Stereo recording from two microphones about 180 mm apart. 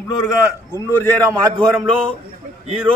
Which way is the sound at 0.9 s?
10° left (ahead or behind).